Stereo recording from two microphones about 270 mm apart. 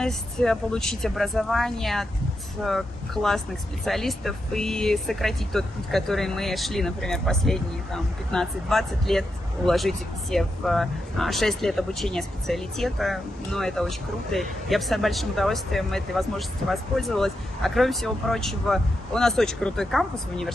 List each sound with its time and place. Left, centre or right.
0.0 s speech: centre